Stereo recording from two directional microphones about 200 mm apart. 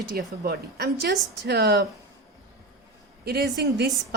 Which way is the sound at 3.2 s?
55° right (ahead or behind).